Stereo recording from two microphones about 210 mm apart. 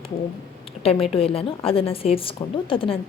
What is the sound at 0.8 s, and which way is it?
A woman's voice, 25° left (ahead or behind).